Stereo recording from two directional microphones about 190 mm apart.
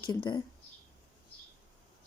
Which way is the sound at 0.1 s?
25° left (ahead or behind).